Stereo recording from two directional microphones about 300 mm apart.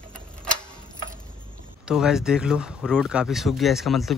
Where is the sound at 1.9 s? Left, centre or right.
Centre.